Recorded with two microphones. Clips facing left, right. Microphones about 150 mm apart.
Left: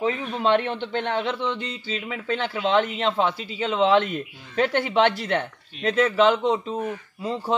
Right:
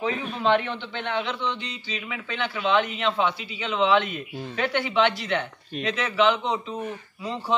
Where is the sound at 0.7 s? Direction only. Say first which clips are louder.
Left 5 dB; 45° left (ahead or behind).